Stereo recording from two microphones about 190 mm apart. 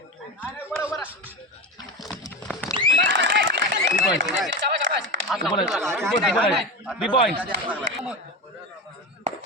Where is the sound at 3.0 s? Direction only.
70° right (ahead or behind).